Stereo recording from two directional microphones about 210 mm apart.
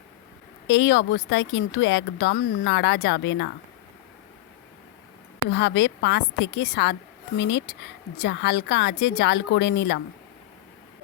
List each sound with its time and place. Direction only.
0.7 s speech: 55° left (ahead or behind)
5.5 s speech: 55° left (ahead or behind)